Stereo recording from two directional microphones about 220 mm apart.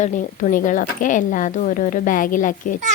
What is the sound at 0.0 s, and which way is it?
A woman's voice, 35° left (ahead or behind).